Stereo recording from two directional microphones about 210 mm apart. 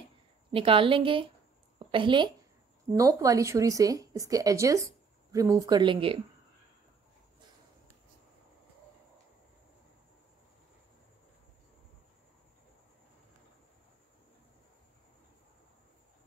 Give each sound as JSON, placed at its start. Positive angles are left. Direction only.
{"t": 0.5, "sound": "a woman's voice", "side_deg": -25}